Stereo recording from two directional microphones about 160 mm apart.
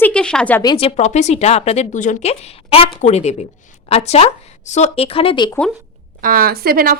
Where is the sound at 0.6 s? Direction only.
35° left (ahead or behind).